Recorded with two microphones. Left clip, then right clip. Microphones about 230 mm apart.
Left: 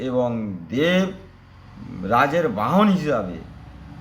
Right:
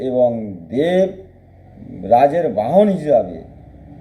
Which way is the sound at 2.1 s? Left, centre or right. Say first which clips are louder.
Right 7 dB; left.